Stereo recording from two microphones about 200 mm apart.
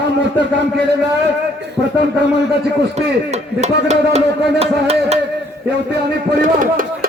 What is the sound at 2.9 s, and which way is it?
Speech, 35° right (ahead or behind).